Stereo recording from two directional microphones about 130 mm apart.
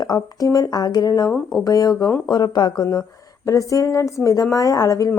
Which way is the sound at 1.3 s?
Centre (ahead or behind).